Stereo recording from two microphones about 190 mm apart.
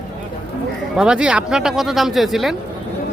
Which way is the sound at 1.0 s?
5° right (ahead or behind).